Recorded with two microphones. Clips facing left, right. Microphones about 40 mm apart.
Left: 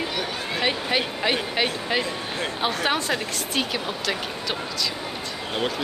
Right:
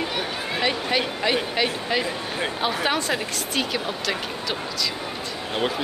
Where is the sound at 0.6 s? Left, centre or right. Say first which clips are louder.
Even; centre.